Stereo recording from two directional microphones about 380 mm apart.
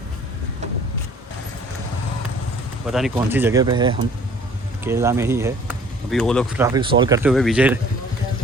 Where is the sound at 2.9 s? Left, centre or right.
Centre.